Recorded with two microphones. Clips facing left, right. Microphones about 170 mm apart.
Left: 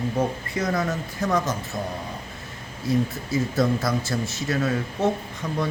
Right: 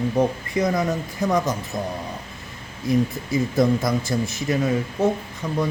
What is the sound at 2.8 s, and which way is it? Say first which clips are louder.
Speech: right 3 dB; 15° right (ahead or behind).